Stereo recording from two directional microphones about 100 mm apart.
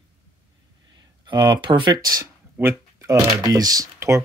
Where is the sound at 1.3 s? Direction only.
50° right (ahead or behind).